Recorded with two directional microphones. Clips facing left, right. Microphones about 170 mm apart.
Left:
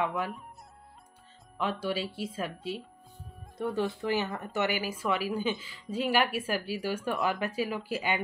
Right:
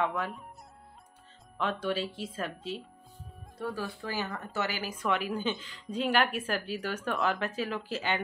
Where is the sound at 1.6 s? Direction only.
10° left (ahead or behind).